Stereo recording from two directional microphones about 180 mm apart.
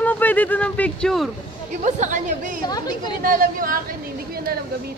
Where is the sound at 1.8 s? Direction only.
45° right (ahead or behind).